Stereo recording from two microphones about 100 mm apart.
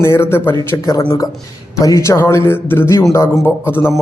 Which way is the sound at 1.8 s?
35° left (ahead or behind).